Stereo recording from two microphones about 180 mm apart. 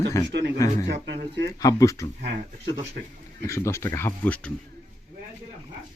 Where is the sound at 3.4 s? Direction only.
15° left (ahead or behind).